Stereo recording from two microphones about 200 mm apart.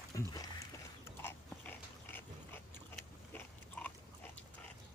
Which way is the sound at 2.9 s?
10° left (ahead or behind).